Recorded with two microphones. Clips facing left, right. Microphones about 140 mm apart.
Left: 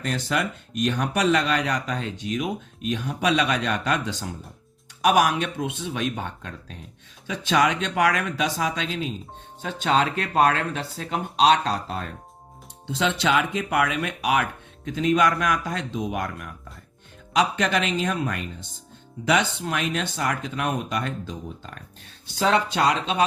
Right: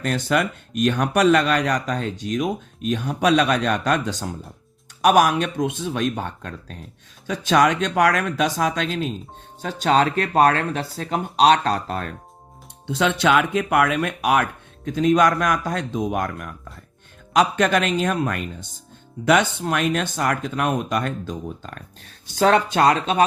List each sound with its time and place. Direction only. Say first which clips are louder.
0.0 s speech: right 4 dB; 55° right (ahead or behind)